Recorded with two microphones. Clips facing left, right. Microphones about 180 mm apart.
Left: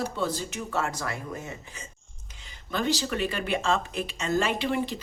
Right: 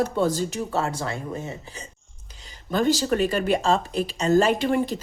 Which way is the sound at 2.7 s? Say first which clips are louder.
Right 7 dB; 40° right (ahead or behind).